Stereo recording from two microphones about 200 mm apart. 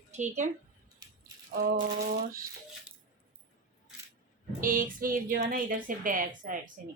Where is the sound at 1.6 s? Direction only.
45° right (ahead or behind).